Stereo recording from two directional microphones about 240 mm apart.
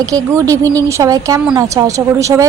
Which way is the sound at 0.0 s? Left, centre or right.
Centre.